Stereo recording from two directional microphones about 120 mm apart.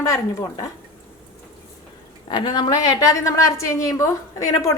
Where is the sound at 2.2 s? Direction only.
35° left (ahead or behind).